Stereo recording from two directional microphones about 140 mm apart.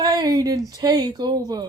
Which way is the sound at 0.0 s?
30° right (ahead or behind).